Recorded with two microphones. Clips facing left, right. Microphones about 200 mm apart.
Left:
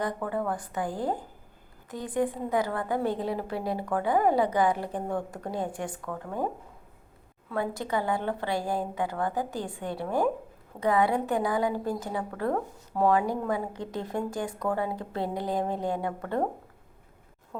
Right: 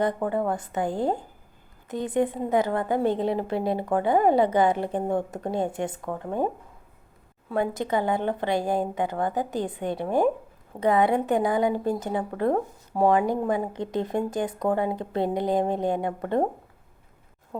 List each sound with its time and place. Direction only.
0.0 s a woman's voice: 25° right (ahead or behind)
7.5 s a woman's voice: 20° right (ahead or behind)
17.5 s speech: 15° right (ahead or behind)